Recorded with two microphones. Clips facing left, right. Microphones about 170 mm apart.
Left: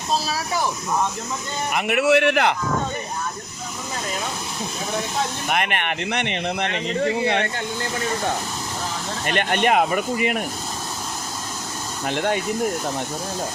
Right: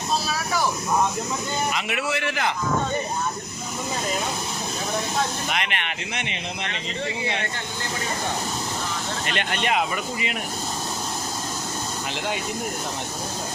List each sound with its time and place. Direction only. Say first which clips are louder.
0.3 s a sound: left 1 dB; 30° left (ahead or behind)
1.7 s speech: left 9 dB; 60° left (ahead or behind)
5.5 s speech: left 5 dB; 50° left (ahead or behind)
9.2 s speech: left 8 dB; 50° left (ahead or behind)
12.0 s speech: left 8 dB; 55° left (ahead or behind)